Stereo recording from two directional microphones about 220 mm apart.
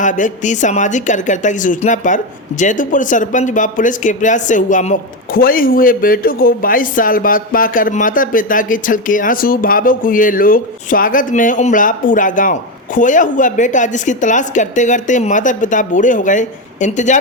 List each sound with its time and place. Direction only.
0.0 s a woman's voice: 35° left (ahead or behind)